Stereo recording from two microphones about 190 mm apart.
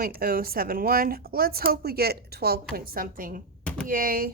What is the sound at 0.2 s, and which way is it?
Speech, 50° right (ahead or behind).